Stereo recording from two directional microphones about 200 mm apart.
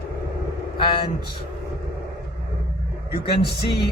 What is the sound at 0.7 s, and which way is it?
Vehicle, 25° left (ahead or behind).